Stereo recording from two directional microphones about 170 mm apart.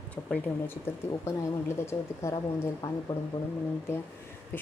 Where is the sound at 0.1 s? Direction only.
10° left (ahead or behind).